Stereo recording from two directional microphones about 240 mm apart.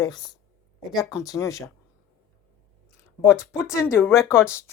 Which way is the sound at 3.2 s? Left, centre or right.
Centre.